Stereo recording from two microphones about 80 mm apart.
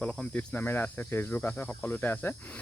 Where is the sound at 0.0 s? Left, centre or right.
Centre.